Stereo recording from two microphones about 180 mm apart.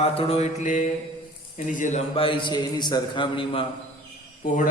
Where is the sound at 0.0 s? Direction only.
35° left (ahead or behind).